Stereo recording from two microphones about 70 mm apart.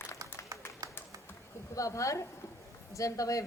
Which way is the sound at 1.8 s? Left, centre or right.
Left.